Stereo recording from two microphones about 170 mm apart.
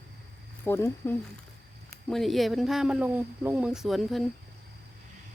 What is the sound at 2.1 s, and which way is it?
Speech, centre (ahead or behind).